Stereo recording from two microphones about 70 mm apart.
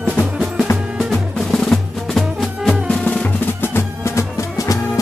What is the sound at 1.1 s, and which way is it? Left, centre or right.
Percussion, centre.